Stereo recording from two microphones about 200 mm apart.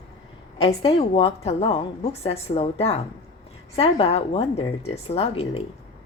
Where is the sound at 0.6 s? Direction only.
30° left (ahead or behind).